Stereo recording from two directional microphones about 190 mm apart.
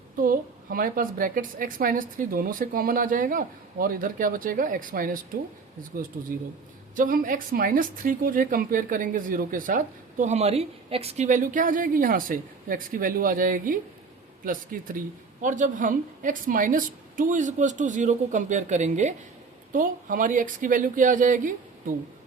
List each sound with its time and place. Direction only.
0.2 s a woman's voice: 45° right (ahead or behind)
6.9 s a woman's voice: 45° right (ahead or behind)